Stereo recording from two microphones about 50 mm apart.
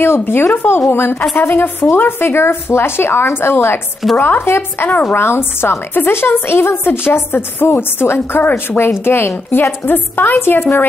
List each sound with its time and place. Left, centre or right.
0.0 s a woman's voice: left